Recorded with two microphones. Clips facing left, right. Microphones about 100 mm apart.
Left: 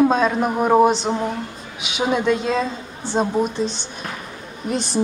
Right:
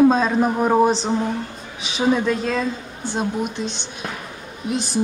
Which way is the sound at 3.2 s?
40° left (ahead or behind).